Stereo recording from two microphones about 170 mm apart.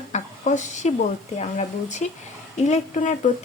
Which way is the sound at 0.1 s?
45° left (ahead or behind).